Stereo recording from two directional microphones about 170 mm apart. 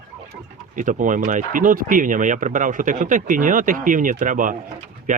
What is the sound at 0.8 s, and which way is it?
Speech, 50° right (ahead or behind).